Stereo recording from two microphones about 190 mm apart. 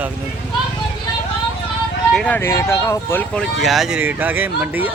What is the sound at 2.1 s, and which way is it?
Speech, 5° left (ahead or behind).